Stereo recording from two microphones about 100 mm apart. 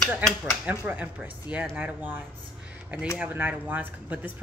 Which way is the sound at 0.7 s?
15° right (ahead or behind).